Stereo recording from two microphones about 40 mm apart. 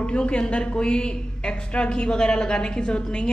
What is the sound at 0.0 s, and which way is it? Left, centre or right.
A woman's voice, left.